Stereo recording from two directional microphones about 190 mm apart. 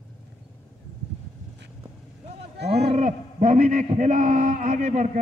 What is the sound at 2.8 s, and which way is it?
A man's voice, 35° right (ahead or behind).